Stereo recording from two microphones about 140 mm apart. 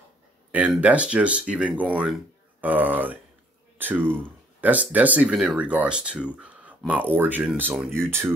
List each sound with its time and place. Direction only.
0.5 s speech: 10° right (ahead or behind)